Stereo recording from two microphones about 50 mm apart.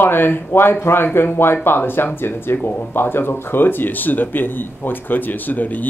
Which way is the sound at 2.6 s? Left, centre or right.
Left.